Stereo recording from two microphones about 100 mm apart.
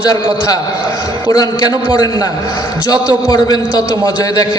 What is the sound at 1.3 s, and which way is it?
A man's voice, 40° left (ahead or behind).